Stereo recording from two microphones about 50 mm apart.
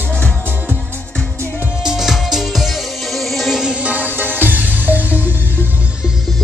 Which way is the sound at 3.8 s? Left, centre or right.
Right.